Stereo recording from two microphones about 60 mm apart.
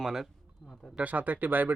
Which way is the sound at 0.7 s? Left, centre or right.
Centre.